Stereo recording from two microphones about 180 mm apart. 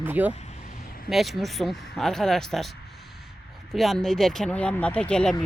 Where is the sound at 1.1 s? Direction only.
Centre (ahead or behind).